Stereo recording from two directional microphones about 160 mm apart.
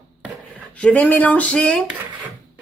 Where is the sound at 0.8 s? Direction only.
10° left (ahead or behind).